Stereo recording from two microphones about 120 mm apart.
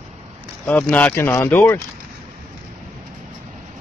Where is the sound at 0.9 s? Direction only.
15° left (ahead or behind).